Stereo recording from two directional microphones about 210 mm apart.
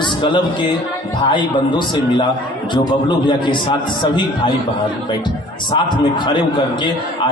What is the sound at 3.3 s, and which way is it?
Speech, 20° left (ahead or behind).